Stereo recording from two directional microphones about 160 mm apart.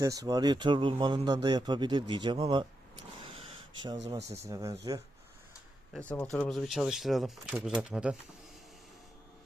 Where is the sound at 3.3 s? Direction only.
35° right (ahead or behind).